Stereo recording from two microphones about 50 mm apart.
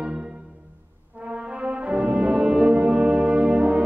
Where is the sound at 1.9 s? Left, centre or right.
Right.